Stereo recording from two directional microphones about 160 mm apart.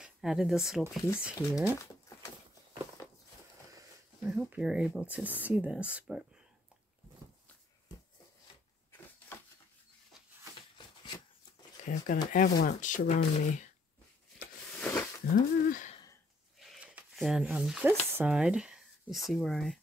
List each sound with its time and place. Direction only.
0.0 s speech: 5° right (ahead or behind)
1.5 s speech: 20° left (ahead or behind)
4.2 s speech: 5° right (ahead or behind)
11.8 s speech: 50° left (ahead or behind)
14.8 s a sound: 10° left (ahead or behind)
15.3 s speech: 55° left (ahead or behind)
16.5 s a sound: centre (ahead or behind)
19.2 s speech: centre (ahead or behind)